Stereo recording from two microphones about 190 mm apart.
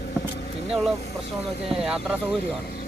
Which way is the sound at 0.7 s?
Centre (ahead or behind).